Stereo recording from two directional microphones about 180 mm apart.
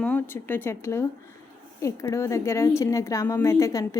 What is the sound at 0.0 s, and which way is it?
Speech, 10° left (ahead or behind).